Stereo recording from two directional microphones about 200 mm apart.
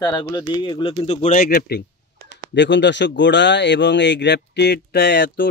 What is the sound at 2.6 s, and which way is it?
Speech, 60° left (ahead or behind).